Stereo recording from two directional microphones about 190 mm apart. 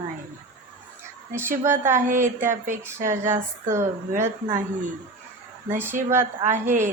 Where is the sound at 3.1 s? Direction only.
15° right (ahead or behind).